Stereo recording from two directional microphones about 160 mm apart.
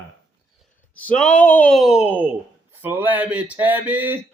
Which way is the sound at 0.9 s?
10° left (ahead or behind).